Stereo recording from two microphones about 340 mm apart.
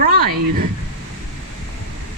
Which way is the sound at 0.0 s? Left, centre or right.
Right.